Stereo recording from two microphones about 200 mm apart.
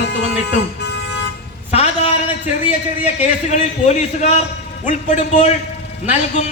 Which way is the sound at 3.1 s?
35° left (ahead or behind).